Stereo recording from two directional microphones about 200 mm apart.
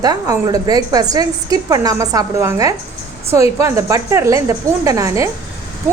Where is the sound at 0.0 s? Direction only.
20° right (ahead or behind).